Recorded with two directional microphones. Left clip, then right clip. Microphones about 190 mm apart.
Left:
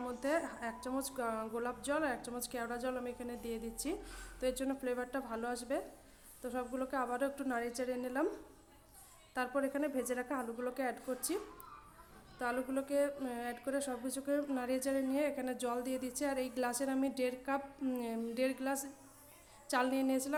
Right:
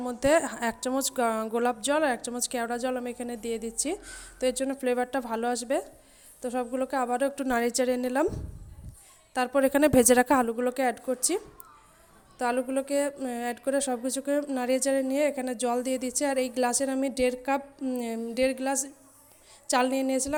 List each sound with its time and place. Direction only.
0.1 s speech: 40° right (ahead or behind)
9.3 s a woman's voice: 40° right (ahead or behind)
12.4 s speech: 35° right (ahead or behind)